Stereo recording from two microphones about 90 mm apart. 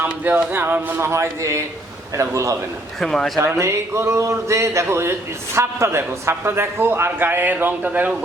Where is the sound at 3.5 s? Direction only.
30° right (ahead or behind).